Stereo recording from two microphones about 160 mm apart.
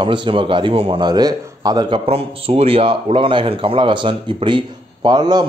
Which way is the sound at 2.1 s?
40° right (ahead or behind).